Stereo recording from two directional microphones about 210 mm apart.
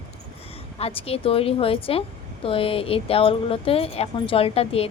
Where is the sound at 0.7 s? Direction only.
30° left (ahead or behind).